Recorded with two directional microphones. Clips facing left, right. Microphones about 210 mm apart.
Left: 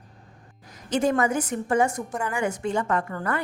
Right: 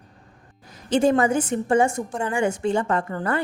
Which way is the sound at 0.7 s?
30° right (ahead or behind).